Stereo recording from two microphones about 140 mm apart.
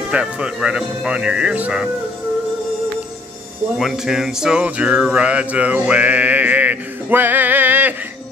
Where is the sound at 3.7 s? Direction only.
5° right (ahead or behind).